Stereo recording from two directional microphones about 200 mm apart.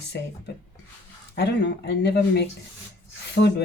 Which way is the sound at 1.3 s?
60° left (ahead or behind).